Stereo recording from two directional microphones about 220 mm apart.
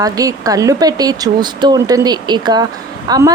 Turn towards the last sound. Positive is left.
turn(degrees=-15)  # may be behind; listen again after turning